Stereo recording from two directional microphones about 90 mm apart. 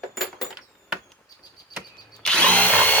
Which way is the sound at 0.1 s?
Centre (ahead or behind).